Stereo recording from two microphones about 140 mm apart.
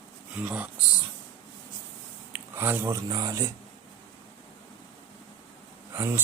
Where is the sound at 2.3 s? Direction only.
15° right (ahead or behind).